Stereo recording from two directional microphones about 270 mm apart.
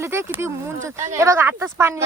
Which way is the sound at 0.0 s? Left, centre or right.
Centre.